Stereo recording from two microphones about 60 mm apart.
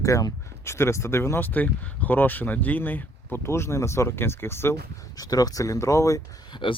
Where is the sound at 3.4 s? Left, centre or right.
Left.